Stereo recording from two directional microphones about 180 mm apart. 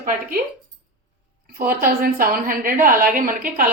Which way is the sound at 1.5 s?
50° right (ahead or behind).